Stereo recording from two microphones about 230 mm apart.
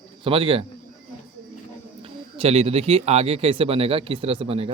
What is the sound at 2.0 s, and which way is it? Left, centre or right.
A man's voice, right.